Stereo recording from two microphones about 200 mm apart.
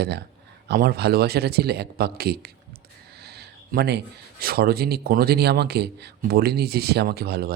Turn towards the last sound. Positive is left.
turn(degrees=-50)  # may be behind; listen again after turning